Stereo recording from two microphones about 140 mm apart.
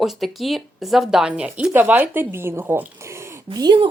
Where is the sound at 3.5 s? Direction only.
30° right (ahead or behind).